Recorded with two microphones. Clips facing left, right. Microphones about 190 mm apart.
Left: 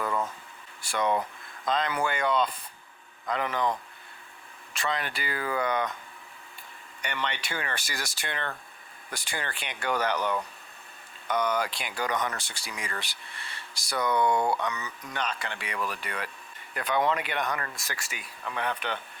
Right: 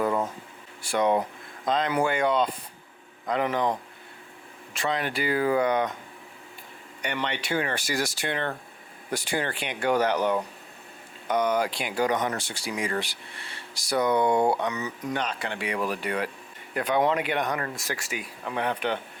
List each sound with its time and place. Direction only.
0.0 s a sound: 20° right (ahead or behind)
1.0 s speech: 10° right (ahead or behind)
5.0 s speech: 15° right (ahead or behind)
7.1 s speech: 10° right (ahead or behind)